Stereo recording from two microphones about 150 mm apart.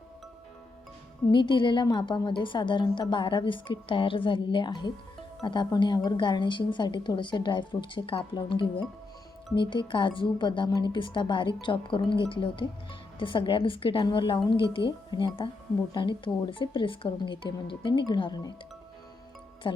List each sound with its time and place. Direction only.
1.3 s a woman's voice: 30° left (ahead or behind)
19.6 s a woman's voice: 35° left (ahead or behind)